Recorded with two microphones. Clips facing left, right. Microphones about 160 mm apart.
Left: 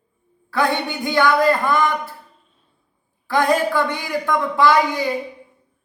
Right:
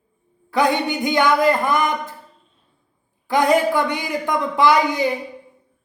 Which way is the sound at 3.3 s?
15° right (ahead or behind).